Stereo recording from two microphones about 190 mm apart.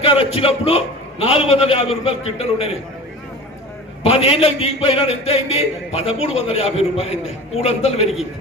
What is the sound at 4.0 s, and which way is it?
A man's voice, 30° left (ahead or behind).